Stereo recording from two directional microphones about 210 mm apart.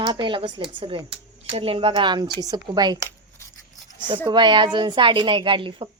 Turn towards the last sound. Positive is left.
turn(degrees=-25)  # may be behind; listen again after turning